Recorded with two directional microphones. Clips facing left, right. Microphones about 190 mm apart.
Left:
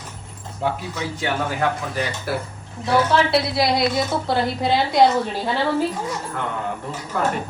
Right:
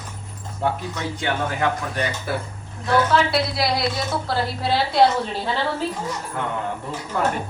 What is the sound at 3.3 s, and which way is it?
A woman's voice, 25° left (ahead or behind).